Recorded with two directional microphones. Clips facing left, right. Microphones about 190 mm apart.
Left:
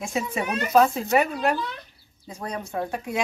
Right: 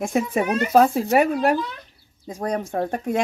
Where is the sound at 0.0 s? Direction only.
55° right (ahead or behind).